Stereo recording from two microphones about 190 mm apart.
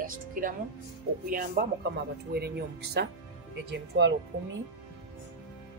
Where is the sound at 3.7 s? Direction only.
70° right (ahead or behind).